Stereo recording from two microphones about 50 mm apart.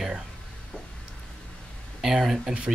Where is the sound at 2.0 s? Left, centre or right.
Centre.